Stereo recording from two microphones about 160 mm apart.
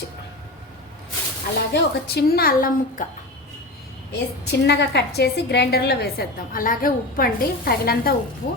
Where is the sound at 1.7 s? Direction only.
80° left; by 3.0 s 65° left (ahead or behind).